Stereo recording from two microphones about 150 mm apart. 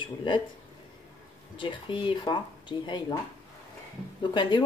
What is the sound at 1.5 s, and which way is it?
Speech, 35° left (ahead or behind).